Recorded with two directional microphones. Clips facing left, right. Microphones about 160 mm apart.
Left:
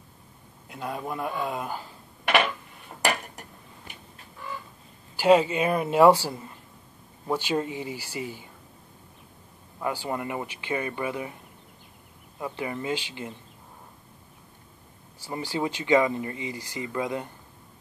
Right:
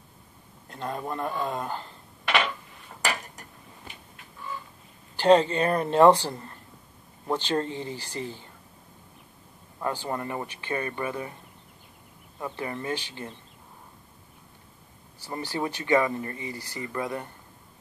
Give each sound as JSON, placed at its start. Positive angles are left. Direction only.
{"t": 0.7, "sound": "speech", "side_deg": 5}
{"t": 5.1, "sound": "speech", "side_deg": 5}
{"t": 9.8, "sound": "speech", "side_deg": 10}
{"t": 12.4, "sound": "speech", "side_deg": 15}
{"t": 15.2, "sound": "speech", "side_deg": 15}